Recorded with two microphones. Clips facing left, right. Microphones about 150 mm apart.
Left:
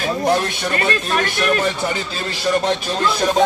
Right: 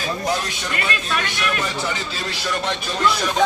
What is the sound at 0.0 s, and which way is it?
A man's voice, 55° left (ahead or behind).